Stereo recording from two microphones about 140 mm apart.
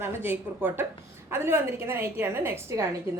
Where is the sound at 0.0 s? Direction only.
15° right (ahead or behind).